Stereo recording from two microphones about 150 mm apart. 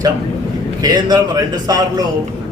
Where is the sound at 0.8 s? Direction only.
25° right (ahead or behind).